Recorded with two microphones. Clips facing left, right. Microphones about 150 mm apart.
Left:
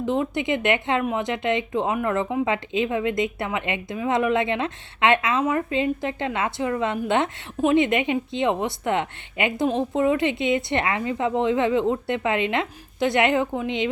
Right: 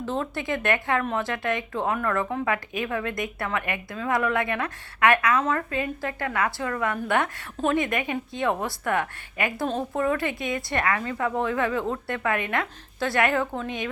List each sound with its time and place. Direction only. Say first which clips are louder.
0.0 s speech: left 5 dB; 15° left (ahead or behind)